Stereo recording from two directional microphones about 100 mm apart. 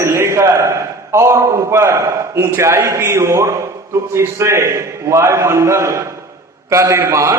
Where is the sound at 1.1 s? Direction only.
30° right (ahead or behind).